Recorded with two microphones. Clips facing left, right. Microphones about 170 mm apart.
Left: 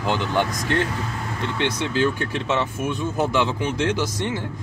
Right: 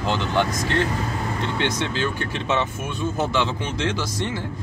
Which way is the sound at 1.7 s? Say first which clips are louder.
Left 3 dB; 10° left (ahead or behind).